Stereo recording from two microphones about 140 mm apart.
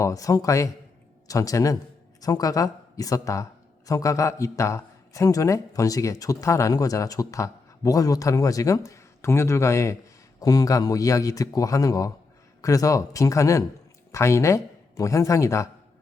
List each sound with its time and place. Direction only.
0.0 s a man's voice: 25° left (ahead or behind)